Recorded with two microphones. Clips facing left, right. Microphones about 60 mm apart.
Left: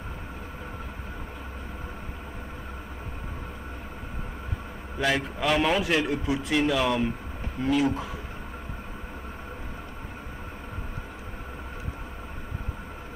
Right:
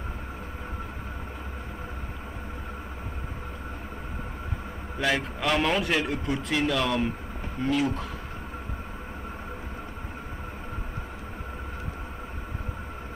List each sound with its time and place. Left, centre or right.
4.9 s a man's voice: centre